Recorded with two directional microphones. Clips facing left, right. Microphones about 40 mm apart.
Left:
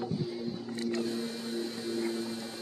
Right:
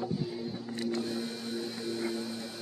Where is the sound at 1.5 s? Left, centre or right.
Right.